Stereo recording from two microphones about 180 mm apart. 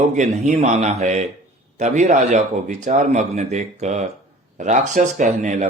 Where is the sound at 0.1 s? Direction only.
40° right (ahead or behind).